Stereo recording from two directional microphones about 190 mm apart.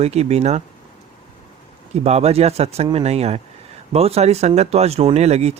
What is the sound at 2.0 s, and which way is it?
Speech, 35° right (ahead or behind).